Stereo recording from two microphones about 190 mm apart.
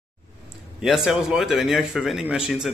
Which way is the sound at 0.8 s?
Centre (ahead or behind).